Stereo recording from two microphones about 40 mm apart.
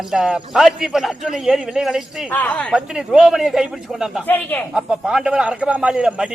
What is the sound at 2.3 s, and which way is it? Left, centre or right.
Speech, left.